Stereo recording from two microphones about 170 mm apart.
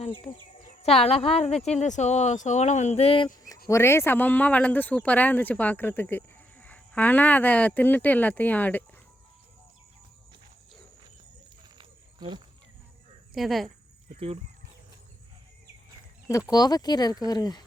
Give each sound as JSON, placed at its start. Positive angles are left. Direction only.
{"t": 0.0, "sound": "speech", "side_deg": 30}
{"t": 3.7, "sound": "speech", "side_deg": 15}
{"t": 11.8, "sound": "a sound", "side_deg": -30}
{"t": 13.3, "sound": "speech", "side_deg": 0}
{"t": 14.1, "sound": "speech", "side_deg": -35}
{"t": 16.5, "sound": "speech", "side_deg": 25}